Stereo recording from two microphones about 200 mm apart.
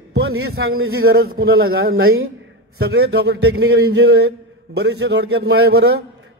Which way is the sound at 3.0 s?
55° right (ahead or behind).